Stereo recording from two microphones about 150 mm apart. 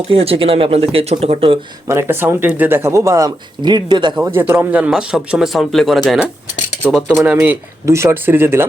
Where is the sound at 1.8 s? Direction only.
15° right (ahead or behind).